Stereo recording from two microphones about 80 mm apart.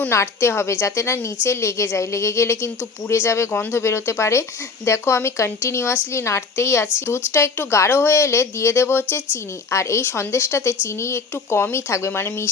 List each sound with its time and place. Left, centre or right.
0.1 s speech: left